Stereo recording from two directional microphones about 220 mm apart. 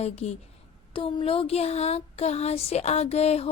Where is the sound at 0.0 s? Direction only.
30° left (ahead or behind).